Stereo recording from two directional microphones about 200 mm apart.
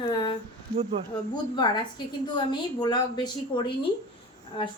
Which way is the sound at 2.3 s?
20° left (ahead or behind).